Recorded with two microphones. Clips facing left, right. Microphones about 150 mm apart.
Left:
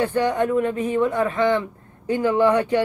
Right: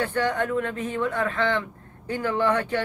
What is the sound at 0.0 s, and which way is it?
Speech, 15° left (ahead or behind).